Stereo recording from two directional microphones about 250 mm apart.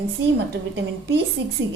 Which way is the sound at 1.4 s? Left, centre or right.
Right.